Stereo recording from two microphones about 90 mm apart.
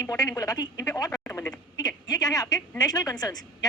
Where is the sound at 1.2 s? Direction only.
30° left (ahead or behind).